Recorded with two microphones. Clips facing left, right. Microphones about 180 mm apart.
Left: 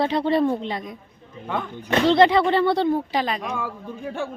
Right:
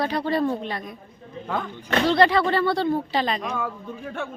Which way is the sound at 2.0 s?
20° left (ahead or behind).